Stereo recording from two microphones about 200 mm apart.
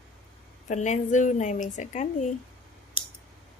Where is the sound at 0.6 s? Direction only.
35° left (ahead or behind).